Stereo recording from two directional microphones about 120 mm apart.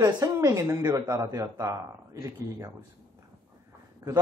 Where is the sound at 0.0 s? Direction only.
30° right (ahead or behind).